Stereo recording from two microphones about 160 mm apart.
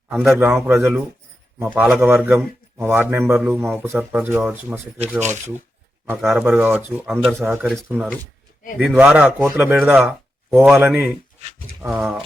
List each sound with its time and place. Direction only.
0.1 s a man's voice: 10° right (ahead or behind)
5.2 s speech: 50° right (ahead or behind)
6.1 s a man's voice: 15° right (ahead or behind)
7.6 s speech: centre (ahead or behind)
7.9 s a man's voice: 10° right (ahead or behind)
10.5 s a man's voice: centre (ahead or behind)